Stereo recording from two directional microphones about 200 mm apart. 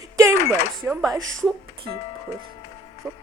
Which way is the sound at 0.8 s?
15° right (ahead or behind).